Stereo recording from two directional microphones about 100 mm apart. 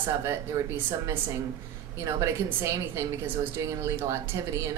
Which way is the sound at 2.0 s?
30° right (ahead or behind).